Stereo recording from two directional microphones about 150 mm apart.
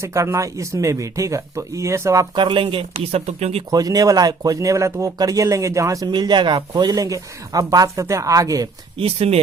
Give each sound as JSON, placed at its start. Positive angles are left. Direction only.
{"t": 0.0, "sound": "speech", "side_deg": -20}
{"t": 2.3, "sound": "speech", "side_deg": -35}
{"t": 3.7, "sound": "speech", "side_deg": -25}
{"t": 9.0, "sound": "speech", "side_deg": -40}